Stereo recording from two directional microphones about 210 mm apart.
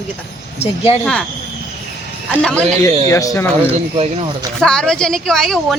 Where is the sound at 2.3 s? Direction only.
5° left (ahead or behind).